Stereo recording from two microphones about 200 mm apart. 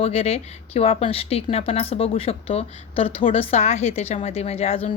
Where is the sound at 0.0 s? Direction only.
30° left (ahead or behind).